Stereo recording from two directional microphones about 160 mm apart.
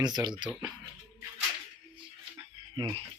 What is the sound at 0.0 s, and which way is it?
Speech, 25° right (ahead or behind).